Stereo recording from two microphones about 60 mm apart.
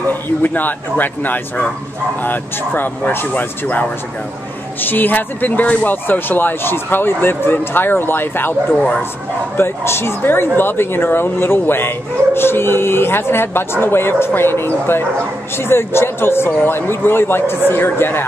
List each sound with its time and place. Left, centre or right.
0.1 s speech: left
4.8 s speech: left
9.6 s speech: left